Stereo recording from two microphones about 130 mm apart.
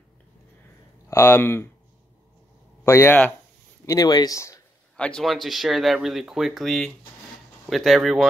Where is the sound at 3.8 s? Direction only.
30° left (ahead or behind).